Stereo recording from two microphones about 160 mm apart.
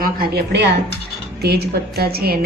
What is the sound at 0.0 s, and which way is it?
A woman's voice, 80° right.